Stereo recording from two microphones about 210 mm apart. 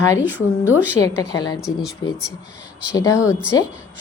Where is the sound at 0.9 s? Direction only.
15° left (ahead or behind).